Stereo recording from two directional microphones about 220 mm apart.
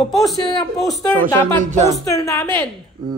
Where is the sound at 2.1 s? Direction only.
15° left (ahead or behind).